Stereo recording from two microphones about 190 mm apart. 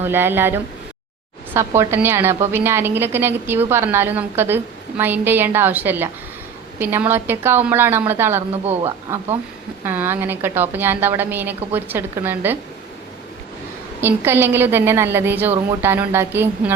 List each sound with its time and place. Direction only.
0.0 s a woman's voice: 10° right (ahead or behind)
14.0 s a woman's voice: 10° right (ahead or behind)